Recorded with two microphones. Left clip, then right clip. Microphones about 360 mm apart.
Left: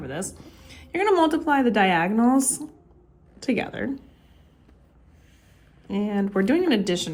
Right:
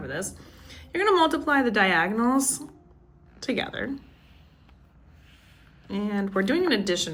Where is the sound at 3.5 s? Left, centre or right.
Left.